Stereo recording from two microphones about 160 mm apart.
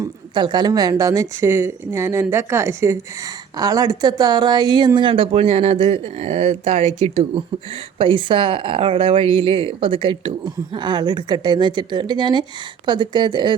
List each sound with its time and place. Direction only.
0.0 s speech: 30° right (ahead or behind)